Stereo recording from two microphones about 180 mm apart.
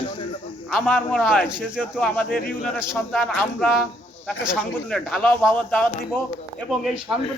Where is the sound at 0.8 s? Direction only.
5° left (ahead or behind).